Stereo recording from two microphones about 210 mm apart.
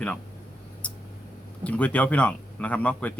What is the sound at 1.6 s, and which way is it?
Speech, 5° left (ahead or behind).